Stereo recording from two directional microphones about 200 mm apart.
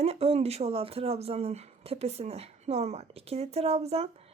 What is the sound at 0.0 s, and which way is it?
A woman's voice, 30° right (ahead or behind).